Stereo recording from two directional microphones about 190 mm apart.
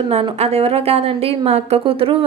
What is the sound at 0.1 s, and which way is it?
A woman's voice, 35° right (ahead or behind).